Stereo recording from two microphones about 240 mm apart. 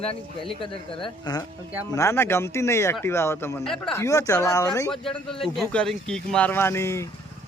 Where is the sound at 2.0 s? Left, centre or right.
Centre.